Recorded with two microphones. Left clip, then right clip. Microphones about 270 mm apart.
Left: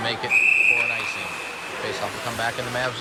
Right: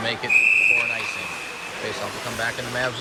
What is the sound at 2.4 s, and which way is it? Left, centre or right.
Speech, centre.